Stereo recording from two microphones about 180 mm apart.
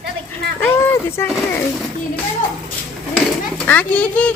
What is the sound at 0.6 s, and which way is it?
Speech, 15° left (ahead or behind).